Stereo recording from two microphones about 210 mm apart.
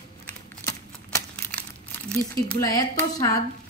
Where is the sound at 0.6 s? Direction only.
10° left (ahead or behind).